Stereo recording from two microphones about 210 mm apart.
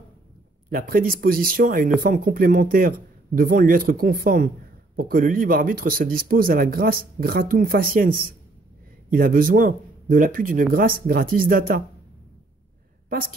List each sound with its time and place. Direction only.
0.7 s speech: 45° right (ahead or behind)